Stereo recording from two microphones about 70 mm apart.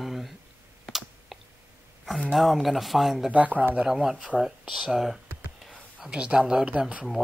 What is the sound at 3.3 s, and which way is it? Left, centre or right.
Speech, right.